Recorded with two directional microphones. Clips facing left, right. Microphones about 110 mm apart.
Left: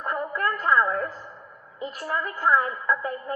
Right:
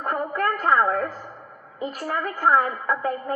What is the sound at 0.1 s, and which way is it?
Music, 50° right (ahead or behind).